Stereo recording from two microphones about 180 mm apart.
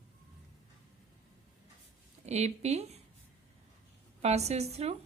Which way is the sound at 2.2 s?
40° right (ahead or behind).